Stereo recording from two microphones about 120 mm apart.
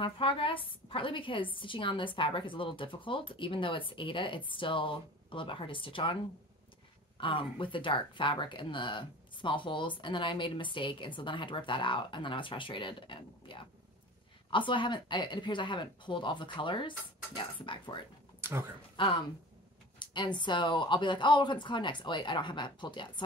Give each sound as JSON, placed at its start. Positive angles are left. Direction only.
{"t": 0.0, "sound": "speech", "side_deg": 50}
{"t": 7.2, "sound": "speech", "side_deg": 45}
{"t": 18.4, "sound": "speech", "side_deg": -20}
{"t": 18.9, "sound": "speech", "side_deg": 45}